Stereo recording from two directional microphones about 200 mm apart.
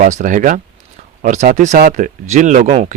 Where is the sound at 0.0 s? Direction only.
40° right (ahead or behind).